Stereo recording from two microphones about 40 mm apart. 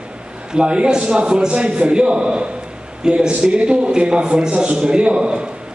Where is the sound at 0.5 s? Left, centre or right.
Right.